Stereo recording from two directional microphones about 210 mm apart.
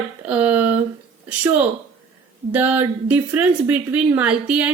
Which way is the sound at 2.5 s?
10° right (ahead or behind).